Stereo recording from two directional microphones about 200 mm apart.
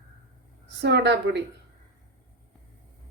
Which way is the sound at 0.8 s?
60° right (ahead or behind).